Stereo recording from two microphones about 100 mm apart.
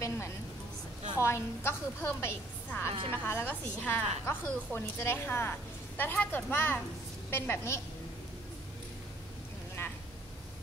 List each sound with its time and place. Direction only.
1.1 s a woman's voice: 25° left (ahead or behind)